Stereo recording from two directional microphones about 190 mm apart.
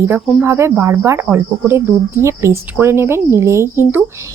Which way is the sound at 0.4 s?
15° right (ahead or behind).